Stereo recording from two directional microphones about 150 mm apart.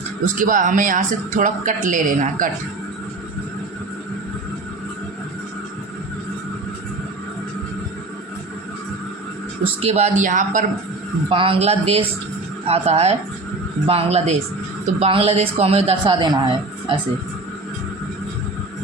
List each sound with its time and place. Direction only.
0.3 s a man's voice: 60° right (ahead or behind)
9.8 s a man's voice: 45° right (ahead or behind)
11.3 s a man's voice: 40° right (ahead or behind)